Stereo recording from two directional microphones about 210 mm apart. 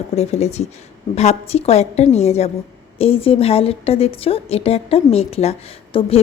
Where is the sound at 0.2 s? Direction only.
30° left (ahead or behind).